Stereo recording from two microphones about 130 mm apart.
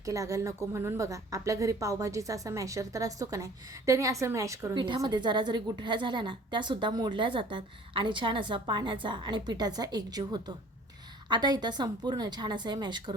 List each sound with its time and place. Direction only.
0.0 s a woman's voice: 25° right (ahead or behind)
4.7 s a woman's voice: 35° right (ahead or behind)